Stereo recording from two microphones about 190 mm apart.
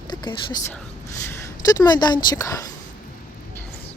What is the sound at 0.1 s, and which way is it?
Speech, 20° left (ahead or behind).